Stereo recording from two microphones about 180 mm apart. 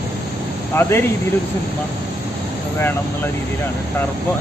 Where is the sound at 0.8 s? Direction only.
15° left (ahead or behind).